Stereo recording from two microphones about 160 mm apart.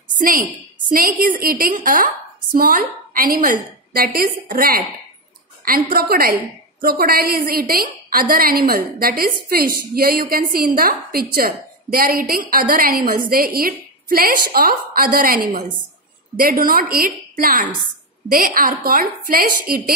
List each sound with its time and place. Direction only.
0.8 s a woman's voice: 60° right (ahead or behind)